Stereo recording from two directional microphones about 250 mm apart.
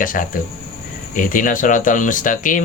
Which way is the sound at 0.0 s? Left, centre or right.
Left.